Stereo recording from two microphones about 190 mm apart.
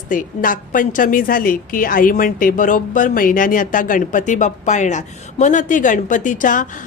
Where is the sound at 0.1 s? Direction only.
45° left (ahead or behind).